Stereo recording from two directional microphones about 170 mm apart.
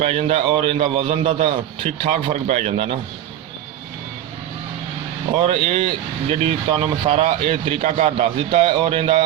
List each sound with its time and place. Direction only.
0.0 s a man's voice: 40° right (ahead or behind)
5.5 s a man's voice: 35° right (ahead or behind)